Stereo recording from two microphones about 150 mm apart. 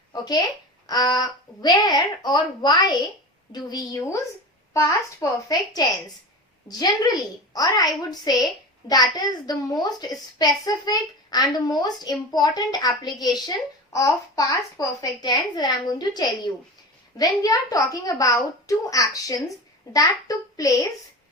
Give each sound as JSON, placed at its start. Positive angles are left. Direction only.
{"t": 0.1, "sound": "a woman's voice", "side_deg": 25}